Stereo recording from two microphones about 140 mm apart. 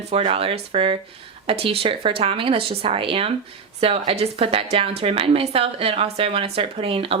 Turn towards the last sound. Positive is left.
turn(degrees=-40)  # may be behind; listen again after turning